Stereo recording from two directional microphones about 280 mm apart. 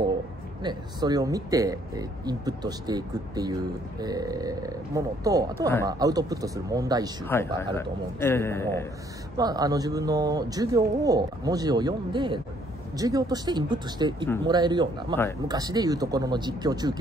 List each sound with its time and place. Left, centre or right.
0.6 s speech: centre
7.2 s a man's voice: centre
9.4 s speech: centre